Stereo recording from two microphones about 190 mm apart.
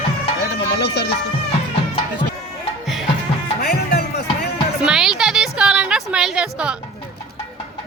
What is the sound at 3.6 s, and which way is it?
Music, 55° left (ahead or behind).